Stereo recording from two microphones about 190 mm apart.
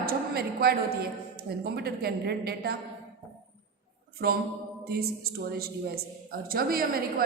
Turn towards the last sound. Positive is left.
turn(degrees=-50)  # may be behind; listen again after turning